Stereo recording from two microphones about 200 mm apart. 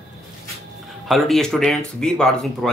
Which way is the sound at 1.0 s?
Centre (ahead or behind).